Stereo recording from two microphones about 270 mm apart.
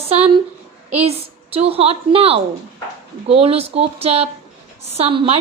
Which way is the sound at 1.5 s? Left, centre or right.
Right.